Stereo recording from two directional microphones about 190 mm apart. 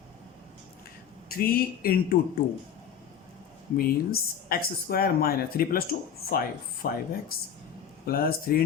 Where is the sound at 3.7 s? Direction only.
50° left (ahead or behind).